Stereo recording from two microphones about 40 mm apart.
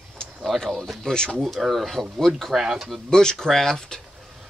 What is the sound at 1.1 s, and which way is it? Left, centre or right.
Speech, centre.